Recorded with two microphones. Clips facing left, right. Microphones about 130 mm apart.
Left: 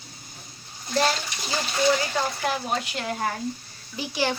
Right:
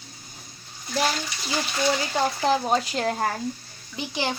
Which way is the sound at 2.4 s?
30° right (ahead or behind).